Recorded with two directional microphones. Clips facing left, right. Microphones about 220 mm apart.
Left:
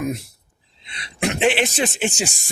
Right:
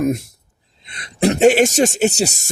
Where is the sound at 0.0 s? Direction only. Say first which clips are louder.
Right 7 dB; 45° right (ahead or behind).